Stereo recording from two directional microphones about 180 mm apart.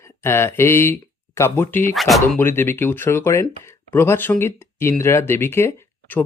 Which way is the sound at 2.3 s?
10° left (ahead or behind).